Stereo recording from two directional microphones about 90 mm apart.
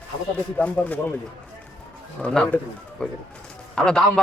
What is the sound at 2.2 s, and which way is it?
A man's voice, 10° left (ahead or behind).